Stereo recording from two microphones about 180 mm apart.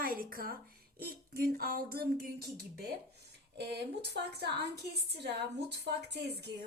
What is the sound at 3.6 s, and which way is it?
A woman's voice, 65° right (ahead or behind).